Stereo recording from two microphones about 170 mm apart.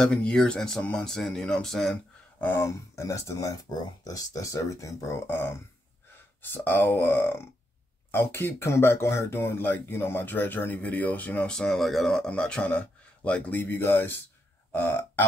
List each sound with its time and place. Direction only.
0.0 s speech: 5° left (ahead or behind)
2.4 s speech: 15° left (ahead or behind)
14.7 s burping: 15° left (ahead or behind)